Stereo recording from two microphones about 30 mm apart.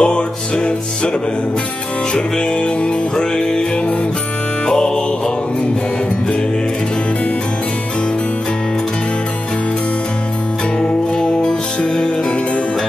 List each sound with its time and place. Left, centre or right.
0.0 s music: left
2.1 s music: left
4.6 s music: left
11.1 s music: left